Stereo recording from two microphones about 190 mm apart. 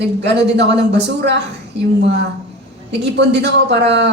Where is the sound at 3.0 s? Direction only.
65° right (ahead or behind).